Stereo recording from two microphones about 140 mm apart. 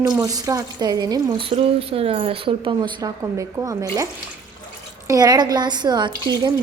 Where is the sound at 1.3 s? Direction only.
40° right (ahead or behind); by 4.0 s 25° right (ahead or behind).